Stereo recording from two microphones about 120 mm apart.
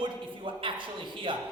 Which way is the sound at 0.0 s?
45° right (ahead or behind).